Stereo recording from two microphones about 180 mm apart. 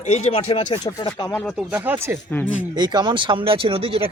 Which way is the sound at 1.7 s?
10° right (ahead or behind).